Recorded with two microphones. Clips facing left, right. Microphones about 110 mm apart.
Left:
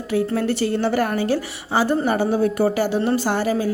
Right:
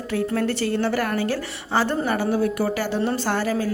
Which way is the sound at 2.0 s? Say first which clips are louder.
Left 3 dB; 25° left (ahead or behind).